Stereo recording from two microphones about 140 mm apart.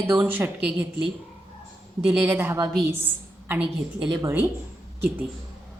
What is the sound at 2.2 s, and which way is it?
A woman's voice, 15° right (ahead or behind).